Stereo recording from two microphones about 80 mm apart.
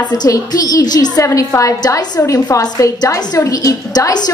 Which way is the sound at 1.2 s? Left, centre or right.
Left.